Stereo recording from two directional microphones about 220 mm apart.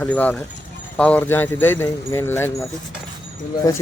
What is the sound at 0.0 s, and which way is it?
A man's voice, 5° left (ahead or behind).